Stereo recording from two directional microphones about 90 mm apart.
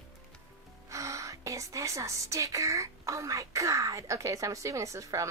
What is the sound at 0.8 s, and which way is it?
A woman's voice, 35° right (ahead or behind).